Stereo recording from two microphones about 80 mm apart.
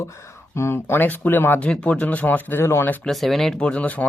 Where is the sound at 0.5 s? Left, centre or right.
Left.